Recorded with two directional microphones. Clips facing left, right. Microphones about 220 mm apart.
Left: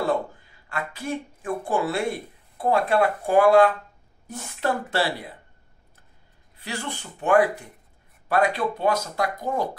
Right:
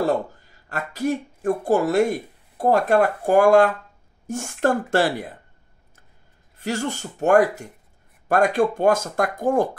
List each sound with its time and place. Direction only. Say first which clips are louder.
0.0 s speech: right 3 dB; 40° right (ahead or behind)
6.5 s speech: right 7 dB; 45° right (ahead or behind)